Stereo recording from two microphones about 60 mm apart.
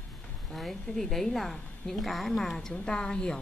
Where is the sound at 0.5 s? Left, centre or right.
Centre.